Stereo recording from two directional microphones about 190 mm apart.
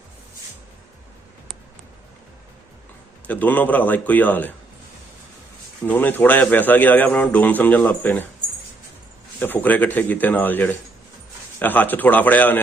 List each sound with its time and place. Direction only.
3.2 s a man's voice: 10° left (ahead or behind)
5.8 s a man's voice: 10° left (ahead or behind)
9.4 s a man's voice: 10° left (ahead or behind)